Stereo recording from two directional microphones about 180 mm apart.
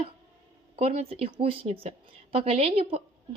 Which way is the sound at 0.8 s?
35° right (ahead or behind).